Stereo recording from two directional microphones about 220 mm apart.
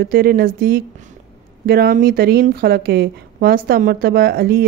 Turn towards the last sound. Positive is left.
turn(degrees=-45)  # may be behind; listen again after turning